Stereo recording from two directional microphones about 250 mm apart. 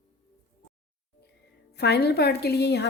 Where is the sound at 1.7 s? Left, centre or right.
Left.